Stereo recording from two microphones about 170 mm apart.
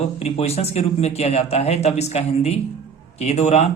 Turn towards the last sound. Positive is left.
turn(degrees=40)  # may be behind; listen again after turning